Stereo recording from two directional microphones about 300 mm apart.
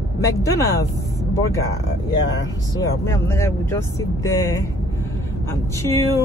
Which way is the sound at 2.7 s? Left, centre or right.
Centre.